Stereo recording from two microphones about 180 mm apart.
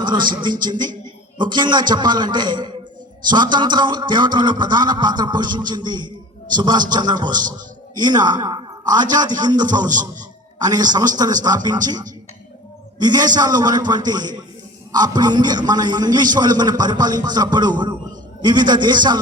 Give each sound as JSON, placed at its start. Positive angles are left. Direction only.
{"t": 0.0, "sound": "a sound", "side_deg": -25}
{"t": 1.4, "sound": "a man's voice", "side_deg": -25}
{"t": 9.8, "sound": "a man's voice", "side_deg": -45}
{"t": 10.6, "sound": "a man's voice", "side_deg": -20}